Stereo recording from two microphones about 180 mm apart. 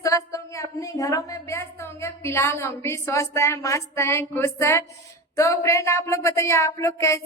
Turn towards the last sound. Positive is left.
turn(degrees=15)  # may be behind; listen again after turning